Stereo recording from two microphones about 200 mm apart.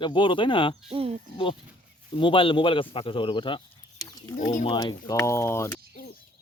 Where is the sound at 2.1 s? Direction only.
25° left (ahead or behind).